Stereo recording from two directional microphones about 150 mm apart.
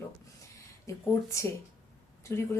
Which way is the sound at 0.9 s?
20° left (ahead or behind).